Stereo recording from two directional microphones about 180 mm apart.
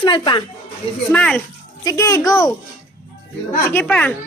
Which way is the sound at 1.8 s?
20° left (ahead or behind).